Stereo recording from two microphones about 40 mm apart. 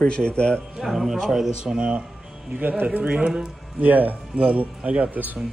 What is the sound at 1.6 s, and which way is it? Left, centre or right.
Speech, right.